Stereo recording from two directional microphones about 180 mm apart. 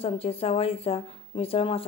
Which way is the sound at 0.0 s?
30° left (ahead or behind).